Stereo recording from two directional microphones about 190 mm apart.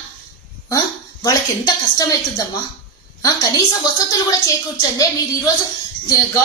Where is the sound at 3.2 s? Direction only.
20° left (ahead or behind).